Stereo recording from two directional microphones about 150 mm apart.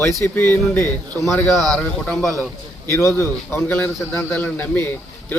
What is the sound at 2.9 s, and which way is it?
A man's voice, 15° left (ahead or behind).